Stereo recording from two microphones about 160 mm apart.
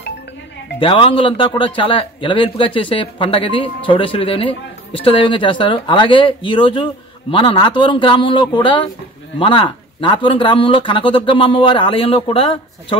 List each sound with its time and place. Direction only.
0.7 s a man's voice: 35° left (ahead or behind)